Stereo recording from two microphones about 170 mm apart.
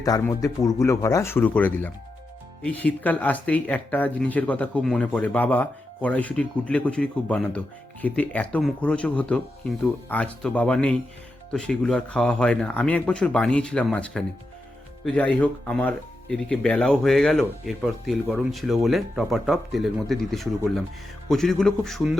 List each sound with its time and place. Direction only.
0.0 s speech: 20° left (ahead or behind); by 22.2 s centre (ahead or behind)